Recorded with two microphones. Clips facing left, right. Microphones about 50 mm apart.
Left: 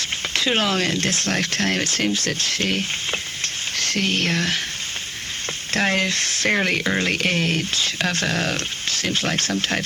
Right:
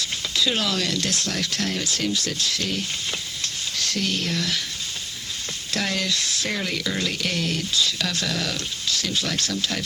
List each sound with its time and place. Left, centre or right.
0.0 s speech: left
5.7 s speech: left